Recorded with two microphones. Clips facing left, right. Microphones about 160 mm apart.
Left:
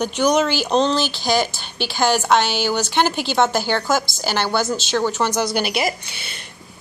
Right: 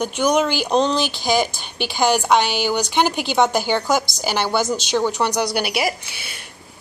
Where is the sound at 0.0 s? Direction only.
10° right (ahead or behind).